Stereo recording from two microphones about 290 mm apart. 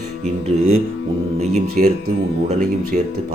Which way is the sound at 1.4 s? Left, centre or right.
Right.